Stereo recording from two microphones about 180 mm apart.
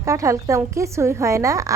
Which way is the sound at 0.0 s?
15° right (ahead or behind).